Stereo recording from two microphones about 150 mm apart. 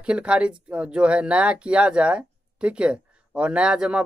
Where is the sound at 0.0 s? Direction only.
5° right (ahead or behind).